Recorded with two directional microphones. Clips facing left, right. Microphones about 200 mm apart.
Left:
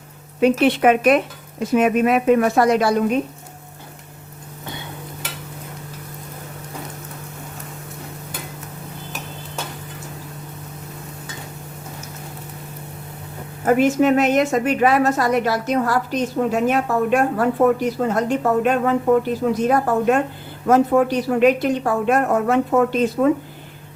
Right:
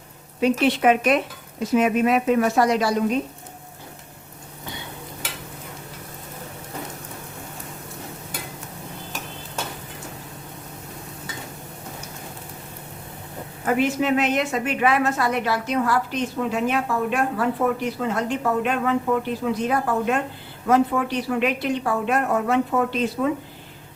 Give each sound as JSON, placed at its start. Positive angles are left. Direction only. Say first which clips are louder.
{"t": 0.3, "sound": "speech", "louder": "left 4 dB", "side_deg": 55}
{"t": 13.7, "sound": "a woman's voice", "louder": "left 6 dB", "side_deg": 45}